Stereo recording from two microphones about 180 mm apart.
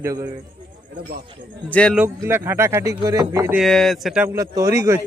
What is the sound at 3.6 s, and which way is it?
Speech, centre (ahead or behind).